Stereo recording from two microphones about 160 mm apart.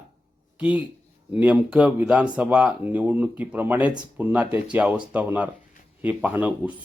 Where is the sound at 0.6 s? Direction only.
10° right (ahead or behind).